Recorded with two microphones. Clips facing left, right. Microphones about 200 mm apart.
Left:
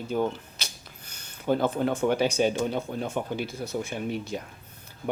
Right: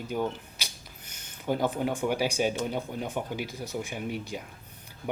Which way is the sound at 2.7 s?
15° right (ahead or behind).